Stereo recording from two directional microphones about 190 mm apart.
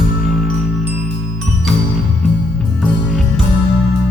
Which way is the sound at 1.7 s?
Centre (ahead or behind).